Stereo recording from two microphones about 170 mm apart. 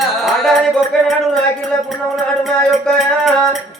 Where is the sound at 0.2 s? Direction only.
Centre (ahead or behind).